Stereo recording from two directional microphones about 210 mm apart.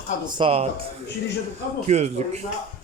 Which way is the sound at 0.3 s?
25° right (ahead or behind).